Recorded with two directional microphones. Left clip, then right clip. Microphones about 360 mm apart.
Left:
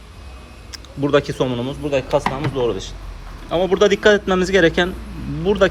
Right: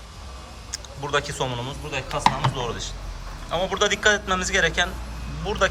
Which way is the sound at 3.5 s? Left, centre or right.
Centre.